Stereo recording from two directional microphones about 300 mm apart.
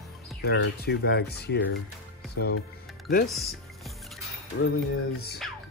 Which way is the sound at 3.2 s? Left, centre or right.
Centre.